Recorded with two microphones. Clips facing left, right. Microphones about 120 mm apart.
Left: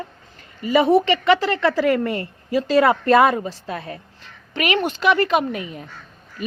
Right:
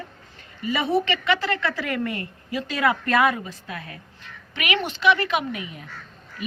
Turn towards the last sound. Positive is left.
turn(degrees=35)  # may be behind; listen again after turning